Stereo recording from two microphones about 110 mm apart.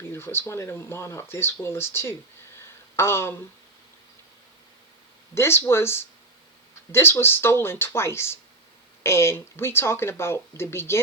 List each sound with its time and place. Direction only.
0.0 s speech: 20° left (ahead or behind)
2.6 s a sound: 20° left (ahead or behind)
5.3 s speech: 20° left (ahead or behind)